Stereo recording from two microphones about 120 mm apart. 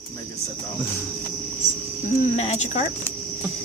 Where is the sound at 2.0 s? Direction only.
75° left (ahead or behind).